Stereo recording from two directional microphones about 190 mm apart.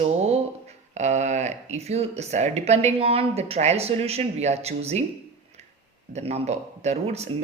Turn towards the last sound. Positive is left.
turn(degrees=-35)  # may be behind; listen again after turning